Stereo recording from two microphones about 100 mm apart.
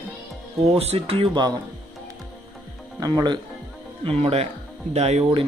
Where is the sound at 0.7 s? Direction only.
85° right.